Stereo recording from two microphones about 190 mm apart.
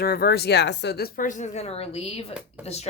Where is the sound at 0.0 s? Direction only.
55° left (ahead or behind).